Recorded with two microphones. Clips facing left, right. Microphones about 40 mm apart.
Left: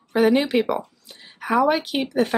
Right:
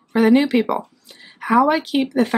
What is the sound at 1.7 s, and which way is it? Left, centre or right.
Speech, centre.